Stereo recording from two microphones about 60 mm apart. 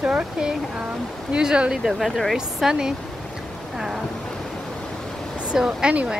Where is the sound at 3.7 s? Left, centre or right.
Centre.